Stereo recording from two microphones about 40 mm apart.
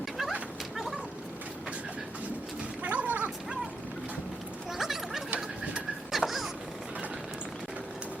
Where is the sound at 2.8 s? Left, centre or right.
Right.